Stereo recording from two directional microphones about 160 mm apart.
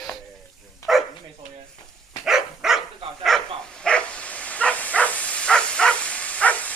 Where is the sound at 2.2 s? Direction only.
5° right (ahead or behind).